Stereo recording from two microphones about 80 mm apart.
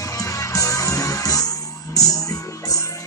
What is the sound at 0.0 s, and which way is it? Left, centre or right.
Music, left.